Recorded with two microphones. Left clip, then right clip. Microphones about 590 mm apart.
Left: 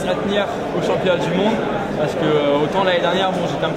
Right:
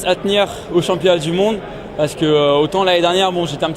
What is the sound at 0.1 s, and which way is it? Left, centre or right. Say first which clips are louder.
Speech: right 6 dB; right.